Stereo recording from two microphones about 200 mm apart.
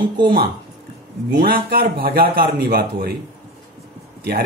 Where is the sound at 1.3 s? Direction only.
45° right (ahead or behind).